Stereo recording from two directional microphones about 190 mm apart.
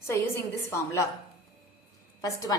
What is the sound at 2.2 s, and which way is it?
Speech, 20° left (ahead or behind).